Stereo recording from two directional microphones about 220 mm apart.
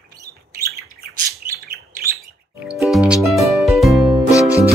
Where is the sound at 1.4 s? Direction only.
45° right (ahead or behind).